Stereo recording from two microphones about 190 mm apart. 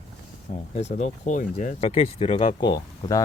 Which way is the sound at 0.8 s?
35° left (ahead or behind).